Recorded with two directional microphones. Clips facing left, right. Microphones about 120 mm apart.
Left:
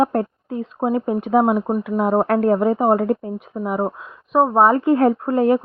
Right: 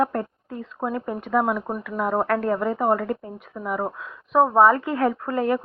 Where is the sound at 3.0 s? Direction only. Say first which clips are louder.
Left 7 dB; 50° left (ahead or behind).